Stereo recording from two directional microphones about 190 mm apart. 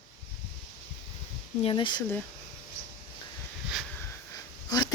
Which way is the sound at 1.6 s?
25° left (ahead or behind).